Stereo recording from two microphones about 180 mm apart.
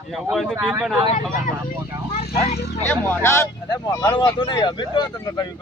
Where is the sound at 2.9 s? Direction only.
10° left (ahead or behind).